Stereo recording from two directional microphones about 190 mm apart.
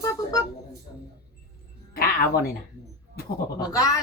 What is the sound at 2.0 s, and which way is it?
Speech, 50° left (ahead or behind).